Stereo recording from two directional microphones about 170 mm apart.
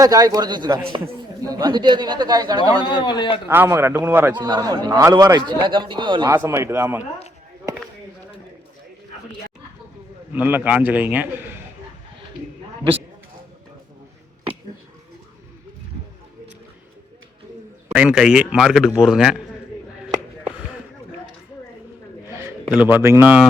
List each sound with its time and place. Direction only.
0.0 s a man's voice: 20° right (ahead or behind)
2.8 s a man's voice: 30° left (ahead or behind)
3.5 s a man's voice: 15° right (ahead or behind)
4.4 s a man's voice: 25° right (ahead or behind)
6.3 s a man's voice: 15° right (ahead or behind)
10.3 s a man's voice: 10° right (ahead or behind)
17.9 s a man's voice: 5° right (ahead or behind)
22.7 s a man's voice: 10° right (ahead or behind)